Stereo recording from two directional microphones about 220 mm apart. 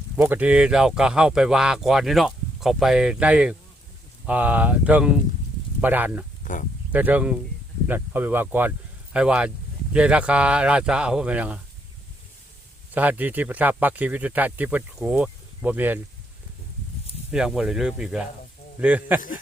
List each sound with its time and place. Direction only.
0.2 s speech: 10° right (ahead or behind)
6.4 s a sound: 35° left (ahead or behind)
6.9 s speech: 5° right (ahead or behind)
12.9 s speech: 5° right (ahead or behind)
17.3 s speech: 5° right (ahead or behind)